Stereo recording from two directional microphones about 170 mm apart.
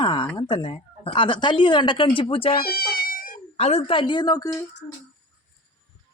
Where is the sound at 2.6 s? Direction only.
65° left (ahead or behind).